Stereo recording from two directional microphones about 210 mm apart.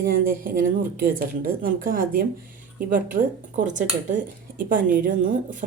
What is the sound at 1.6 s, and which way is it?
A woman's voice, 45° right (ahead or behind).